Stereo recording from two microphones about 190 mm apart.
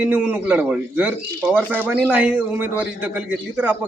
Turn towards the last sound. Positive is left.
turn(degrees=-5)  # may be behind; listen again after turning